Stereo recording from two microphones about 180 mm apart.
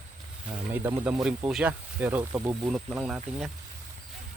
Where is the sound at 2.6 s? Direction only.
5° right (ahead or behind).